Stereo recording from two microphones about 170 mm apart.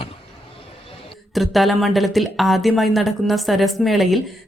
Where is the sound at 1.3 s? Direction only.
Centre (ahead or behind).